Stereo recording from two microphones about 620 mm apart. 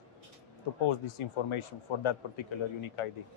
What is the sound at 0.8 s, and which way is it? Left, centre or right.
Speech, left.